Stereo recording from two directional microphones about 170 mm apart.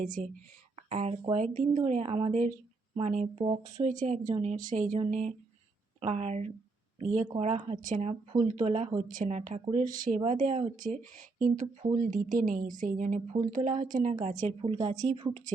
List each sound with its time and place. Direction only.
0.0 s a woman's voice: 50° right (ahead or behind)
0.9 s a woman's voice: 40° right (ahead or behind)
6.0 s a woman's voice: 40° right (ahead or behind)